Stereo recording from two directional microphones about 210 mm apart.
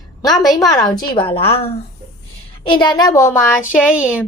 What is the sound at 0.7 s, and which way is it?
A woman's voice, 15° left (ahead or behind).